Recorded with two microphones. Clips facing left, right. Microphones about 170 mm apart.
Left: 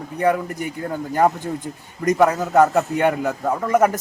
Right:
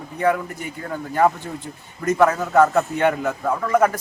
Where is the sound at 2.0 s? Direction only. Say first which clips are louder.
Left 1 dB; 15° left (ahead or behind).